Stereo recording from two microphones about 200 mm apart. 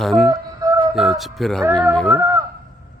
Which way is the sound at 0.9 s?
Centre (ahead or behind).